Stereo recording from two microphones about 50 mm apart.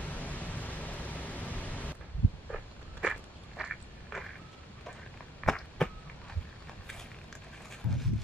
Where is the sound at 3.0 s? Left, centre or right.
Centre.